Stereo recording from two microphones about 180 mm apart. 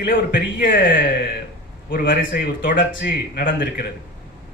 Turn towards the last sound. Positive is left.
turn(degrees=55)  # may be behind; listen again after turning